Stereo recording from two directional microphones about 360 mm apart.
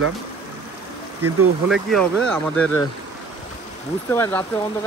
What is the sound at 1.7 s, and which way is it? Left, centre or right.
Speech, centre.